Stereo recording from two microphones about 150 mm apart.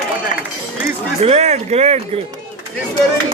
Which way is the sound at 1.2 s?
45° right (ahead or behind).